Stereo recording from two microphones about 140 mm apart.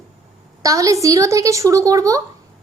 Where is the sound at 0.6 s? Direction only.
25° right (ahead or behind).